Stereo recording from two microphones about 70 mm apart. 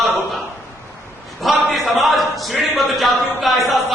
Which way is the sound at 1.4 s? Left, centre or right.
Centre.